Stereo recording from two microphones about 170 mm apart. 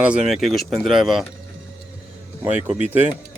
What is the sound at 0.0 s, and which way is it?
Speech, 5° right (ahead or behind).